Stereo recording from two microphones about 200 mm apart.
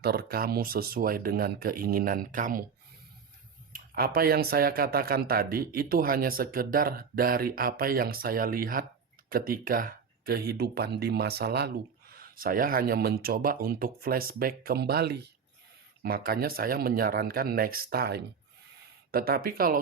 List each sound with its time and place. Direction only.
0.0 s speech: 50° right (ahead or behind)
3.7 s speech: 50° right (ahead or behind)